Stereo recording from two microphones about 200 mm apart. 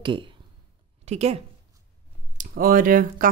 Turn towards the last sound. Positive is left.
turn(degrees=-45)  # may be behind; listen again after turning